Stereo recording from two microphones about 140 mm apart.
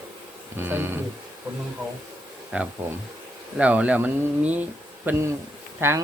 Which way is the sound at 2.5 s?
10° right (ahead or behind).